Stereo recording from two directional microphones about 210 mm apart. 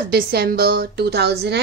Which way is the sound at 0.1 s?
45° right (ahead or behind).